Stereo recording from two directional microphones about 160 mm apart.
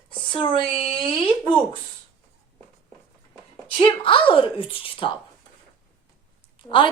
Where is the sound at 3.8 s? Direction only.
30° left (ahead or behind).